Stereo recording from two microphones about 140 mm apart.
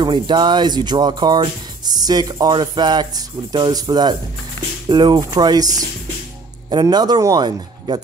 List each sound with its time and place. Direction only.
0.0 s speech: 30° right (ahead or behind)